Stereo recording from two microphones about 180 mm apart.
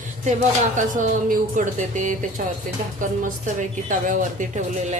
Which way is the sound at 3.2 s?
45° right (ahead or behind).